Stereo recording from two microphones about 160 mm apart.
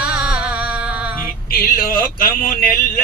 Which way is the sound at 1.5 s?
70° left (ahead or behind).